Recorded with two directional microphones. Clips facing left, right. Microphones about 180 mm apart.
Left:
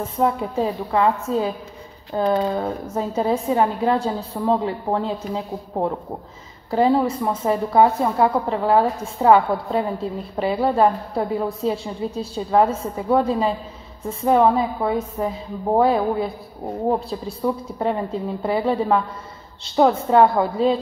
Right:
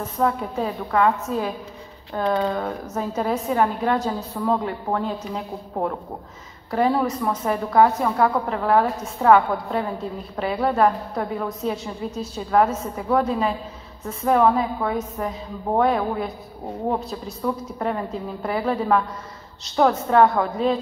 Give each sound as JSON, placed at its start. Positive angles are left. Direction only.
{"t": 0.0, "sound": "a woman's voice", "side_deg": 25}